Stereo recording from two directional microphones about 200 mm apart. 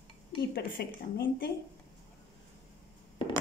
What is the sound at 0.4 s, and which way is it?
A woman's voice, 50° left (ahead or behind).